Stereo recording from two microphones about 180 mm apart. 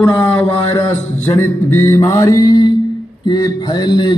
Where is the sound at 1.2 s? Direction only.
15° left (ahead or behind).